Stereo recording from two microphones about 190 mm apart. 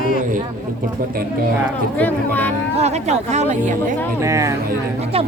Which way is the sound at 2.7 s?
35° right (ahead or behind).